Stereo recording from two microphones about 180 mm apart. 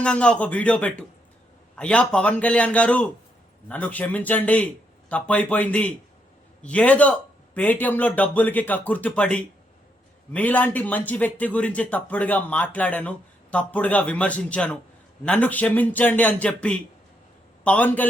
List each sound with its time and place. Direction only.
0.0 s speech: 5° left (ahead or behind)